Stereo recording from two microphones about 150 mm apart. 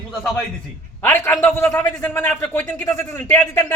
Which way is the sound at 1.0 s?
20° left (ahead or behind).